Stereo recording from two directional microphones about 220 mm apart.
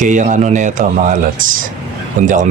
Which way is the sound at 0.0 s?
35° right (ahead or behind).